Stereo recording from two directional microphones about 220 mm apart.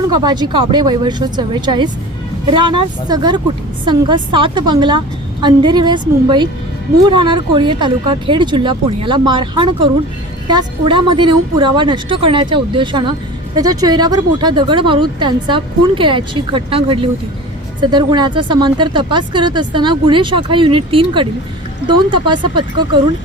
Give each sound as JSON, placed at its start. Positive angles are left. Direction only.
{"t": 0.3, "sound": "speech", "side_deg": -20}